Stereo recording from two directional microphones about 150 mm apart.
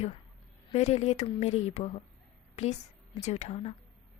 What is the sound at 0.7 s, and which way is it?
A woman's voice, 45° left (ahead or behind).